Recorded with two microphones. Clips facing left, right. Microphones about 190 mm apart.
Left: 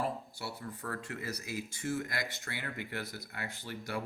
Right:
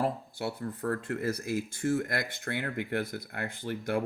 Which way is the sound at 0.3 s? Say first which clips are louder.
Right 8 dB; 55° right (ahead or behind).